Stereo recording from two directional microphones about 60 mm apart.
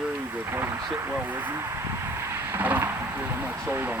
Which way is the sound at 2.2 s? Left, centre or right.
Right.